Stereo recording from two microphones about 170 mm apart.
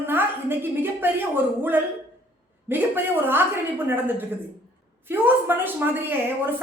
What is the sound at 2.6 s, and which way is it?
A woman's voice, 10° right (ahead or behind).